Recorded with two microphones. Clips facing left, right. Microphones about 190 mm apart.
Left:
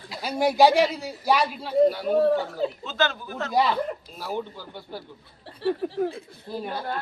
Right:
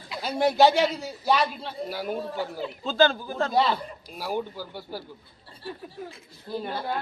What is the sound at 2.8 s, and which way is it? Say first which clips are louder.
Speech: right 5 dB; 30° right (ahead or behind).